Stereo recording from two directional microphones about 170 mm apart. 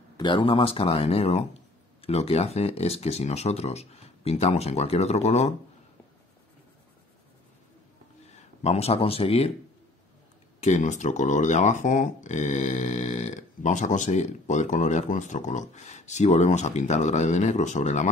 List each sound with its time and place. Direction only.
0.2 s speech: 30° left (ahead or behind)
8.6 s speech: 35° left (ahead or behind)
10.6 s speech: 45° left (ahead or behind)